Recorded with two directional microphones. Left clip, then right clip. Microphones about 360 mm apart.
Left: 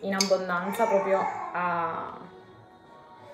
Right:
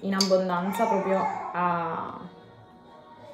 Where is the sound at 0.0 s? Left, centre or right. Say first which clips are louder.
Right 2 dB; centre.